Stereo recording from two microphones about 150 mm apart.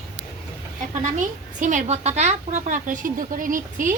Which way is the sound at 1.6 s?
55° right (ahead or behind).